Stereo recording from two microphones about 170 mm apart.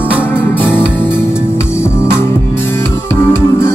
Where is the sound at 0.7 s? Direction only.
5° right (ahead or behind).